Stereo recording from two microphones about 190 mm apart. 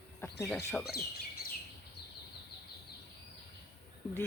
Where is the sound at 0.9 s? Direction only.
55° left (ahead or behind).